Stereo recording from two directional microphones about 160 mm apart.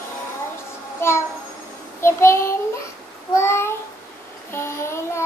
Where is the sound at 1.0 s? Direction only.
15° left (ahead or behind).